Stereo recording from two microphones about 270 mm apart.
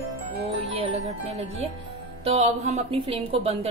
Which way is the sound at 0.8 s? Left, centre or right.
Right.